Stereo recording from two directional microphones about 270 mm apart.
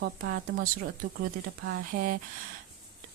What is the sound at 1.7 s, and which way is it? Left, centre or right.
Speech, right.